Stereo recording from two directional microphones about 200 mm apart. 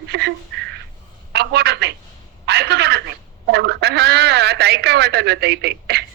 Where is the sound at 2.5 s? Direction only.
55° right (ahead or behind).